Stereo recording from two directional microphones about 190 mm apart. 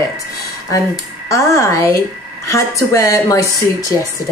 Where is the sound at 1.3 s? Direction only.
15° left (ahead or behind).